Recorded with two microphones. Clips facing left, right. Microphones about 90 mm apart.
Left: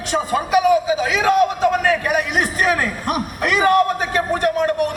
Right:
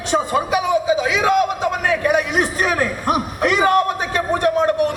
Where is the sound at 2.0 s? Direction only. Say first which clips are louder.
Right 2 dB; 35° right (ahead or behind).